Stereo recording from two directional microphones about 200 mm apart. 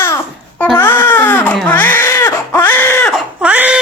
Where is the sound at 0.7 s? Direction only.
10° left (ahead or behind).